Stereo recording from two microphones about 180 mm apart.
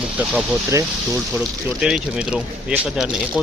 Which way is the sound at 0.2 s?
5° right (ahead or behind).